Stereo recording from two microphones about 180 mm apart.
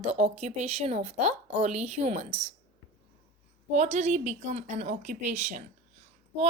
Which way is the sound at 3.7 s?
40° right (ahead or behind).